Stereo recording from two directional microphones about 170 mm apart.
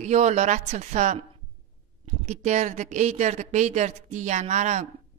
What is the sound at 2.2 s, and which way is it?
A woman's voice, 40° right (ahead or behind).